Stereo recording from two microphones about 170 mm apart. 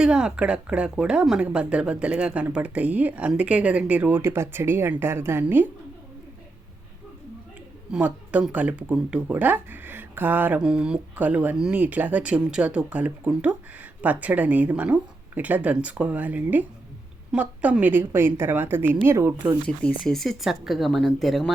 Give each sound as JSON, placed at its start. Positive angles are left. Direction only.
{"t": 0.0, "sound": "speech", "side_deg": -5}
{"t": 7.9, "sound": "speech", "side_deg": -5}
{"t": 19.6, "sound": "speech", "side_deg": 5}